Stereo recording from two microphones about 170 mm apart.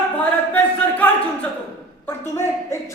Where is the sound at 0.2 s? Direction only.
10° left (ahead or behind).